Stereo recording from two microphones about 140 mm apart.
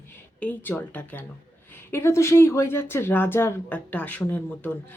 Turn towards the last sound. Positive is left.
turn(degrees=10)  # may be behind; listen again after turning